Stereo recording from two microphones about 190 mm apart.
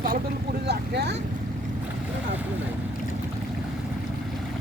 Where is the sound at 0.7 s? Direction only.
60° right (ahead or behind).